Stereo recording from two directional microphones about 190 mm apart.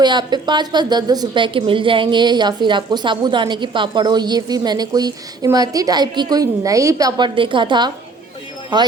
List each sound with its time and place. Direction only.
0.0 s a woman's voice: 20° right (ahead or behind)